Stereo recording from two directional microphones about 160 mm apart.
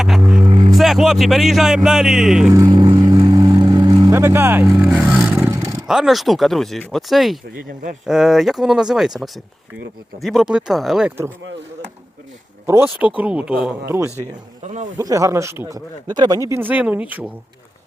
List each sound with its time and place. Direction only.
0.4 s vehicle: 25° right (ahead or behind)
0.8 s speech: centre (ahead or behind)
2.5 s vehicle: 25° right (ahead or behind)
4.8 s speech: 5° right (ahead or behind)
5.5 s roar: 15° right (ahead or behind)
5.9 s speech: centre (ahead or behind)
7.5 s speech: 55° right (ahead or behind)
8.0 s speech: centre (ahead or behind)
12.6 s speech: 15° right (ahead or behind)
14.6 s a man's voice: 45° right (ahead or behind)
14.9 s speech: 20° right (ahead or behind)